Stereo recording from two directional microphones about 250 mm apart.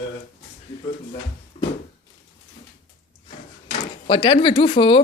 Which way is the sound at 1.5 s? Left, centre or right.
Left.